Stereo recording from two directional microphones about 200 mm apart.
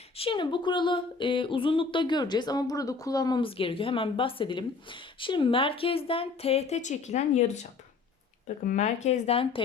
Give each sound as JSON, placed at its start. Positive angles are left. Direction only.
{"t": 0.2, "sound": "speech", "side_deg": 25}
{"t": 8.6, "sound": "speech", "side_deg": 35}